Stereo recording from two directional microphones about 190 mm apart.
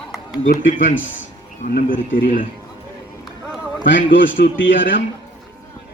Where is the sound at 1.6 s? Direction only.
50° left (ahead or behind).